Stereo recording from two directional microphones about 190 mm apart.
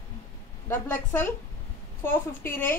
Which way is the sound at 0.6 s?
10° left (ahead or behind).